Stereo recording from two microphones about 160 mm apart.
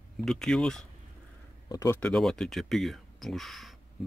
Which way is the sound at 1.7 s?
20° left (ahead or behind).